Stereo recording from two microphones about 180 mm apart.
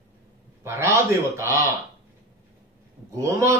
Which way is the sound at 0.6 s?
15° right (ahead or behind).